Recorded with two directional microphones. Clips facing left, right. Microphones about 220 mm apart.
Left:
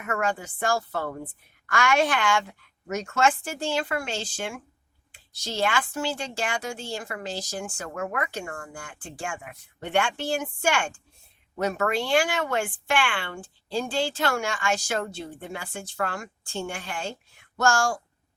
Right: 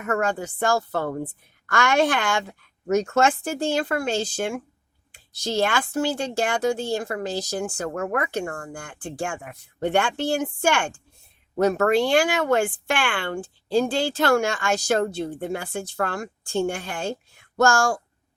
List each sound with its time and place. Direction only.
0.0 s a woman's voice: 40° right (ahead or behind)
11.5 s a woman's voice: 45° right (ahead or behind)